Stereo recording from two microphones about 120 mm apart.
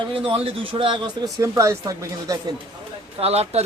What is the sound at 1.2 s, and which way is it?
Speech, 25° right (ahead or behind).